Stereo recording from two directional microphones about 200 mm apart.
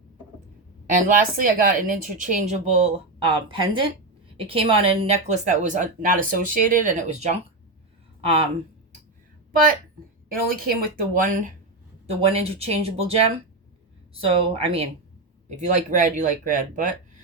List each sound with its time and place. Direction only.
0.9 s speech: 40° right (ahead or behind)
10.3 s a woman's voice: 45° right (ahead or behind)
12.0 s speech: 30° right (ahead or behind)